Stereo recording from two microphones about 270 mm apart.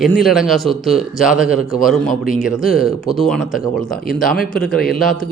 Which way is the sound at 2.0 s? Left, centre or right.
Left.